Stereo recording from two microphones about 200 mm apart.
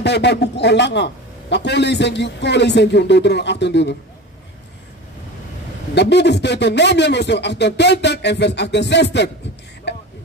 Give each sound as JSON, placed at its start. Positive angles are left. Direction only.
{"t": 0.0, "sound": "a man's voice", "side_deg": 60}
{"t": 5.9, "sound": "a man's voice", "side_deg": 60}
{"t": 9.9, "sound": "a sound", "side_deg": 60}